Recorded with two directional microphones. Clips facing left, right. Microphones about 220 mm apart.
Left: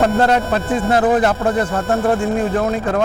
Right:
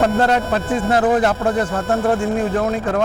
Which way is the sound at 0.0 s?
20° left (ahead or behind).